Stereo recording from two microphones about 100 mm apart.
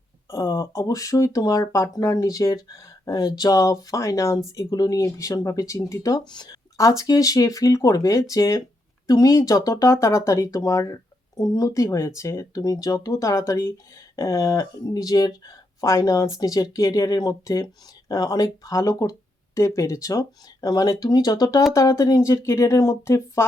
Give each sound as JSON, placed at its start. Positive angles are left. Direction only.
{"t": 0.3, "sound": "speech", "side_deg": 30}
{"t": 6.3, "sound": "speech", "side_deg": 40}